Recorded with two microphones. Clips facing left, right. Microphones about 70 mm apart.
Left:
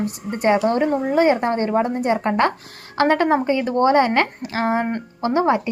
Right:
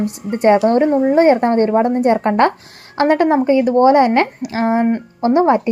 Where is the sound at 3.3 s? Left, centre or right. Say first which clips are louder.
Right 6 dB; centre.